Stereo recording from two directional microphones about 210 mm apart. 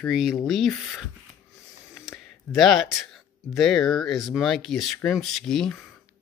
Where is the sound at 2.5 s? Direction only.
Centre (ahead or behind).